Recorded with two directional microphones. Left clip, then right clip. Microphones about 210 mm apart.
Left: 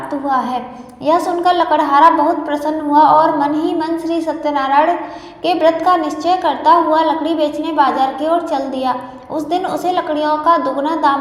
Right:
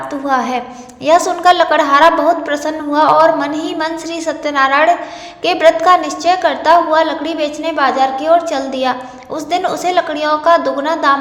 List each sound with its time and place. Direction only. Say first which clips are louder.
0.1 s a woman's voice: right 1 dB; 25° right (ahead or behind)